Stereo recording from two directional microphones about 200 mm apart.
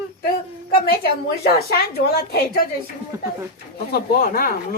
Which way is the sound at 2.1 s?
50° left (ahead or behind).